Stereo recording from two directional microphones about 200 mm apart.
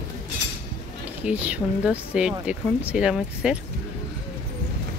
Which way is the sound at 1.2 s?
5° right (ahead or behind).